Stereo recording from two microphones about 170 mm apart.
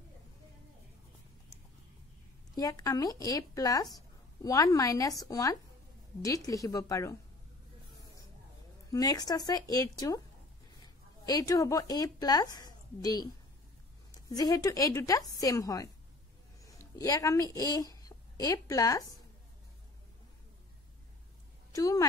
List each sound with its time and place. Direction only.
2.5 s speech: 20° left (ahead or behind)
8.9 s speech: 25° left (ahead or behind)
16.6 s a sound: 20° left (ahead or behind)
17.7 s a woman's voice: 20° left (ahead or behind)
21.7 s speech: 20° left (ahead or behind)